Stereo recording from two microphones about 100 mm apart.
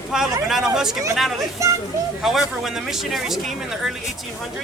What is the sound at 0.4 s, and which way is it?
Speech, 5° right (ahead or behind).